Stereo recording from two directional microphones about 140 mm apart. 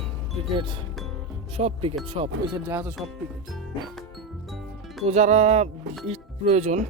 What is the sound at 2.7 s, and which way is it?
Speech, 15° right (ahead or behind).